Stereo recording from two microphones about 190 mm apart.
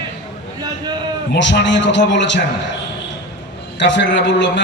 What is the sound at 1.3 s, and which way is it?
A man's voice, 70° left (ahead or behind).